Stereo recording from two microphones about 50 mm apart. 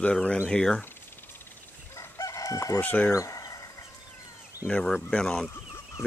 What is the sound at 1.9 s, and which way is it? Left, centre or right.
Chicken, left.